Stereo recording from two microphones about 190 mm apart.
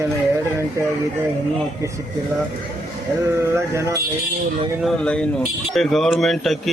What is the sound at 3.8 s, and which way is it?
Speech, 15° right (ahead or behind).